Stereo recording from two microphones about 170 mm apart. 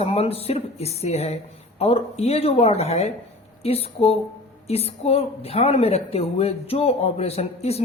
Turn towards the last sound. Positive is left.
turn(degrees=40)  # may be behind; listen again after turning